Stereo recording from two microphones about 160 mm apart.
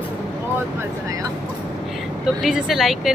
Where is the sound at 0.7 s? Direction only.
20° right (ahead or behind).